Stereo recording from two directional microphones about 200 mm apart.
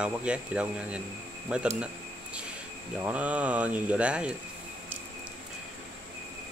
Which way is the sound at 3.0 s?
5° right (ahead or behind).